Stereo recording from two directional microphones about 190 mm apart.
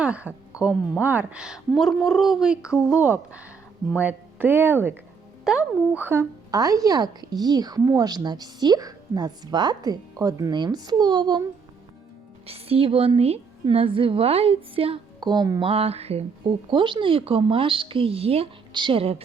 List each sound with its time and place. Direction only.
0.0 s a woman's voice: 5° right (ahead or behind); by 11.4 s 20° right (ahead or behind)
12.5 s a woman's voice: 30° right (ahead or behind)